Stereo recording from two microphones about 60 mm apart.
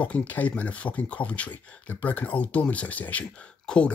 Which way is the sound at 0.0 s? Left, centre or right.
Left.